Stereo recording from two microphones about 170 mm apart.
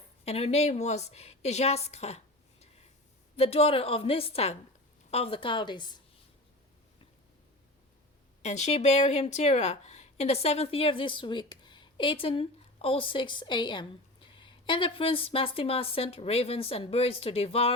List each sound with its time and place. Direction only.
0.3 s a woman's voice: 35° left (ahead or behind)
8.4 s speech: 40° left (ahead or behind)